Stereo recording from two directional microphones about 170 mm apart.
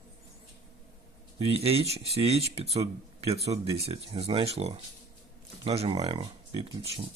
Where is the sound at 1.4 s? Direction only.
35° right (ahead or behind).